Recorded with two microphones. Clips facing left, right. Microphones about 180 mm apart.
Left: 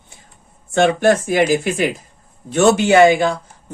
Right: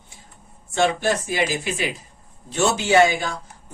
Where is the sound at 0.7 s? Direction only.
55° left (ahead or behind).